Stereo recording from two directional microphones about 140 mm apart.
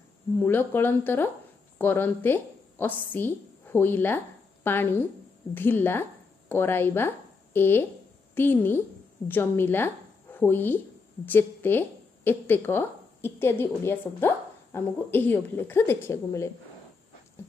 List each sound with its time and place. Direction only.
0.4 s a woman's voice: 15° left (ahead or behind)